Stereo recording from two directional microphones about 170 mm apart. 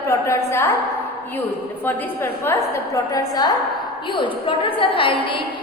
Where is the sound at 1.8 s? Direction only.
10° left (ahead or behind); by 5.4 s 30° left (ahead or behind).